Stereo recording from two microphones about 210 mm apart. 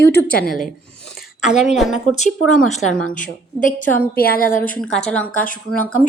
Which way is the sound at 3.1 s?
40° left (ahead or behind).